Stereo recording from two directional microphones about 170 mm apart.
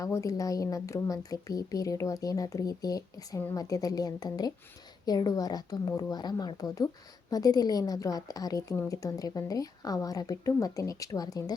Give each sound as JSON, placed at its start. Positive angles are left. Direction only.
{"t": 0.0, "sound": "a woman's voice", "side_deg": 20}